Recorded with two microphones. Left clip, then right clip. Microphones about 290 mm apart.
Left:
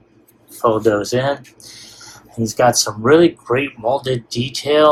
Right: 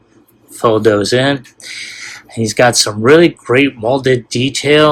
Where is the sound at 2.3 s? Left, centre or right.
Right.